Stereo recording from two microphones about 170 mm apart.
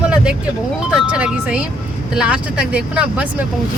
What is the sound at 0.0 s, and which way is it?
Vehicle, 5° right (ahead or behind).